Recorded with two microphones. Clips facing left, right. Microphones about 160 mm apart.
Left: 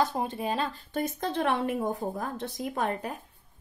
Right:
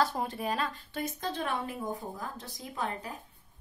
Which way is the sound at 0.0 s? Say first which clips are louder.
Left 2 dB; 20° left (ahead or behind).